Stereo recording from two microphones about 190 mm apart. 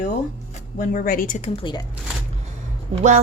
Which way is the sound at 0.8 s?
45° left (ahead or behind).